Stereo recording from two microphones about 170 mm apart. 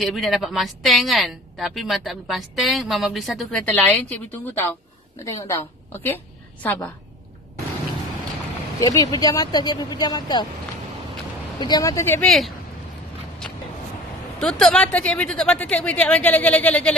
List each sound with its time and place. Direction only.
0.0 s a woman's voice: centre (ahead or behind)
8.7 s speech: 20° left (ahead or behind)
11.6 s speech: 20° left (ahead or behind)
12.2 s a woman's voice: centre (ahead or behind)
13.4 s a sound: 5° left (ahead or behind)
14.4 s a woman's voice: 5° left (ahead or behind)